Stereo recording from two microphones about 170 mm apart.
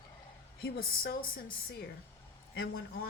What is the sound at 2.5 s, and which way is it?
Speech, 65° left (ahead or behind).